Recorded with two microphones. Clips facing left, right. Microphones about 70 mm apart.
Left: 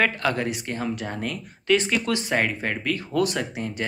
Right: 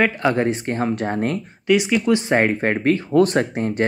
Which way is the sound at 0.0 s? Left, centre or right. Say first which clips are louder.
Right 5 dB; right.